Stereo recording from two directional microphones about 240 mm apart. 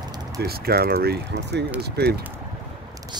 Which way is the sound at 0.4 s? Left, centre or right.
Right.